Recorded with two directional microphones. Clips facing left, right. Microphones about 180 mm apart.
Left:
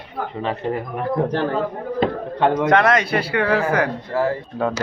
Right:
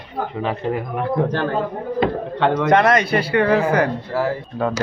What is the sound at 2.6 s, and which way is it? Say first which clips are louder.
Speech: right 3 dB; centre (ahead or behind).